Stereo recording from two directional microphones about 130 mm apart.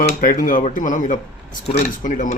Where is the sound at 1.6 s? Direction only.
60° left (ahead or behind); by 2.3 s 80° left.